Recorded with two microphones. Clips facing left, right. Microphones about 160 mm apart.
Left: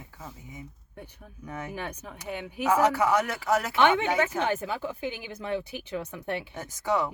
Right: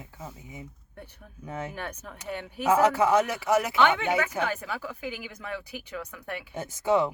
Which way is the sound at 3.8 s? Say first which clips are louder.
Left 1 dB; 20° left (ahead or behind).